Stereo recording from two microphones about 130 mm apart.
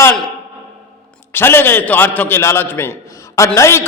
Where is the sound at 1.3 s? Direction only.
15° left (ahead or behind).